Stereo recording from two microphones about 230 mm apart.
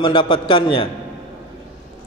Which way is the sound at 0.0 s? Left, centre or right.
Left.